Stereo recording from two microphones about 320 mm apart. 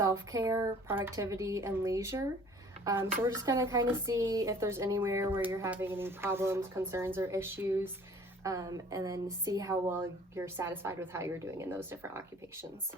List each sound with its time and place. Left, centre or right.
0.0 s speech: centre